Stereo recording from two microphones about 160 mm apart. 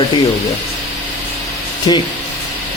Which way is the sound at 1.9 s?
30° left (ahead or behind).